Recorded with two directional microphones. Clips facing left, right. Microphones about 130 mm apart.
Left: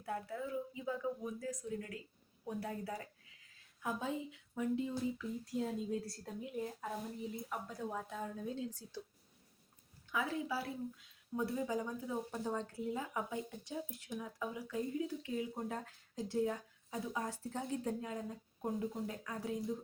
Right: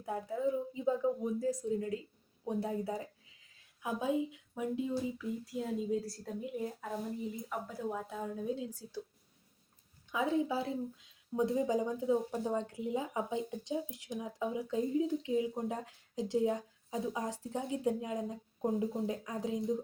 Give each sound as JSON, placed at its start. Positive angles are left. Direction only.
{"t": 0.0, "sound": "speech", "side_deg": -20}
{"t": 10.1, "sound": "speech", "side_deg": -20}